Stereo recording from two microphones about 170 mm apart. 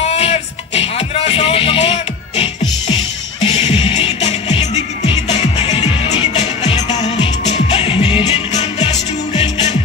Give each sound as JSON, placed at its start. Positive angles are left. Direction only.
{"t": 0.0, "sound": "music", "side_deg": 40}
{"t": 8.5, "sound": "music", "side_deg": 40}